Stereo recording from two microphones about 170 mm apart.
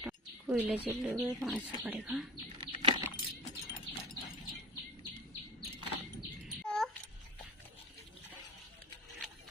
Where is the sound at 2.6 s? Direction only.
30° right (ahead or behind).